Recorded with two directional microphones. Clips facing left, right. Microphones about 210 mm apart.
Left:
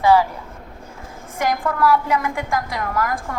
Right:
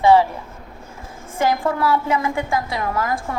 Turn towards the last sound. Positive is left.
turn(degrees=-25)  # may be behind; listen again after turning